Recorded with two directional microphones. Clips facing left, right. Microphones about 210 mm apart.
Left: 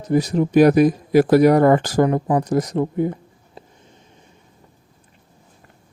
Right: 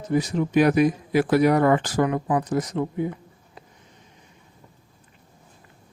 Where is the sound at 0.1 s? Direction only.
40° left (ahead or behind).